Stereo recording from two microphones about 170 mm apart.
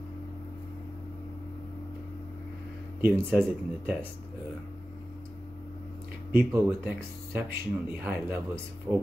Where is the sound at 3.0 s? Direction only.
10° right (ahead or behind).